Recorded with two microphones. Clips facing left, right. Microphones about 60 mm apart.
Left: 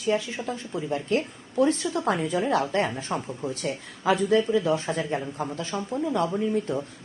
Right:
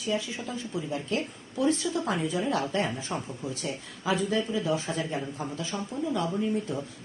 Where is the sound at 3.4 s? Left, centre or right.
Left.